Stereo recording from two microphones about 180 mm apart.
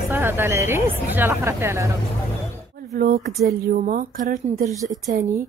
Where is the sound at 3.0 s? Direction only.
55° right (ahead or behind).